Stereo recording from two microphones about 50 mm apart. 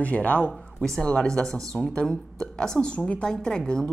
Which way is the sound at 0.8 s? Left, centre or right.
Centre.